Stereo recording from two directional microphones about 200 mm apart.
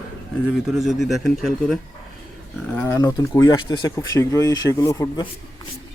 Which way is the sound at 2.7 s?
15° left (ahead or behind).